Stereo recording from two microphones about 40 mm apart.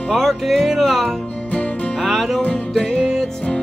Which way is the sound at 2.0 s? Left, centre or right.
Centre.